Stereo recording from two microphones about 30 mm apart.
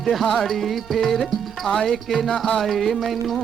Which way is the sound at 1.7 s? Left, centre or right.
Left.